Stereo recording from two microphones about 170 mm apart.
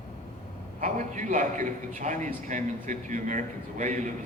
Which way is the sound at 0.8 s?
45° right (ahead or behind).